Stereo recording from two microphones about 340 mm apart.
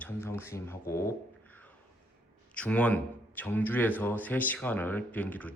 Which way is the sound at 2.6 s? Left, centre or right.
Centre.